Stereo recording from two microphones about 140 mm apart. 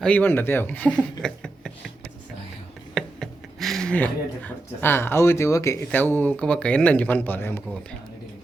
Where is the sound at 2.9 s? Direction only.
Centre (ahead or behind).